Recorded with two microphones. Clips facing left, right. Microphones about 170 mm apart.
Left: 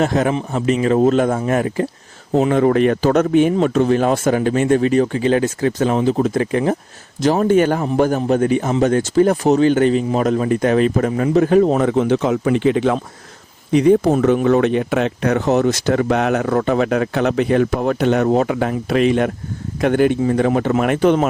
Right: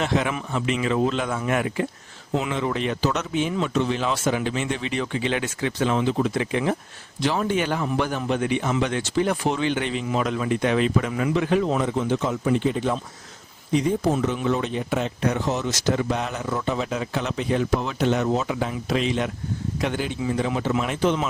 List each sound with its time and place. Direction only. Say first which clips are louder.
0.0 s a man's voice: left 7 dB; 45° left (ahead or behind)
11.9 s speech: left 8 dB; 70° left (ahead or behind); by 13.0 s 90° left
13.7 s speech: left 9 dB; 70° left (ahead or behind)